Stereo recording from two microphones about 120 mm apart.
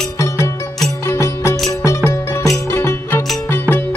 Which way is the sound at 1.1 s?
25° left (ahead or behind).